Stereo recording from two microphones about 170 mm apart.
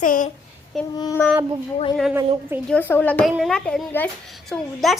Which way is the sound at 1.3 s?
20° right (ahead or behind).